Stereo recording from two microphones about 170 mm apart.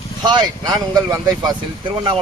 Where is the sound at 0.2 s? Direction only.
25° right (ahead or behind).